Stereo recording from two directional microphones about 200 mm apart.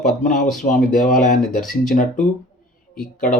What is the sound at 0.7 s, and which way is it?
Speech, 40° left (ahead or behind).